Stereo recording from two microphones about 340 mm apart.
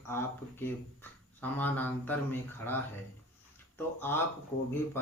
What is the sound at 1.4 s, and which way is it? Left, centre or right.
Speech, centre.